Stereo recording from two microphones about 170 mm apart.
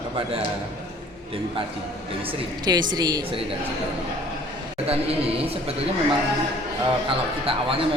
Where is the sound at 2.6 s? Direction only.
25° right (ahead or behind).